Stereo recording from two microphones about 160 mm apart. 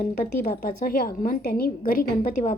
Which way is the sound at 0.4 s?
65° left (ahead or behind).